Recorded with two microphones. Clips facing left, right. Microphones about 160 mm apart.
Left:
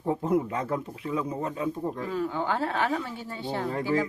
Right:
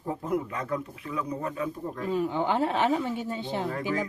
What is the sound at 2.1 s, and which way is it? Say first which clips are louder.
Speech: right 4 dB; 20° right (ahead or behind).